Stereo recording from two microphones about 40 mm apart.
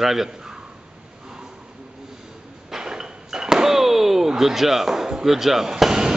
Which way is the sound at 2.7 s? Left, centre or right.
Centre.